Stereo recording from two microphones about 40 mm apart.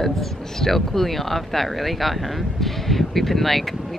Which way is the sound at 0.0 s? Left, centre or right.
Centre.